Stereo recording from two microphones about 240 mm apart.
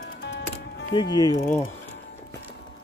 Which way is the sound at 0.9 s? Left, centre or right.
Centre.